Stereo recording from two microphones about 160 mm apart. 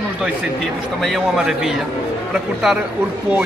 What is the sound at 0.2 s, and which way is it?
Speech, centre (ahead or behind).